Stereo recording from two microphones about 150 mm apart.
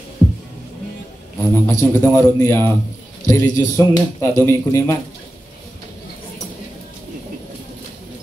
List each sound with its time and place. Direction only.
1.5 s a man's voice: 15° left (ahead or behind)